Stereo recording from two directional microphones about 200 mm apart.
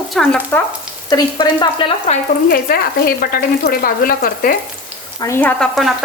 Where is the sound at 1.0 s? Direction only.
20° left (ahead or behind).